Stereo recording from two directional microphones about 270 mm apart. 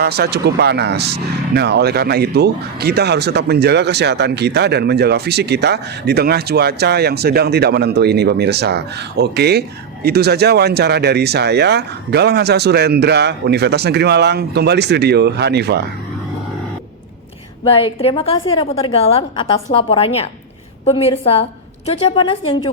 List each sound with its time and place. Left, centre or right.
0.0 s speech: right
17.6 s a woman's voice: centre